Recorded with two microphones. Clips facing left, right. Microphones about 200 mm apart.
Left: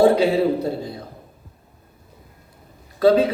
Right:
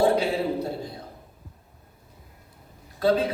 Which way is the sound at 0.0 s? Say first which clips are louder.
Left 7 dB; 90° left.